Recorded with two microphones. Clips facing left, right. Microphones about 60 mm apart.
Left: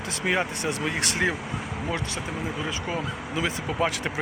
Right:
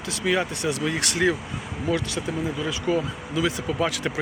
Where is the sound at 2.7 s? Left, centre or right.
Left.